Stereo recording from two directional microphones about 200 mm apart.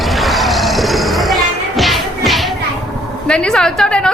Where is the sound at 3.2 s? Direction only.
5° left (ahead or behind).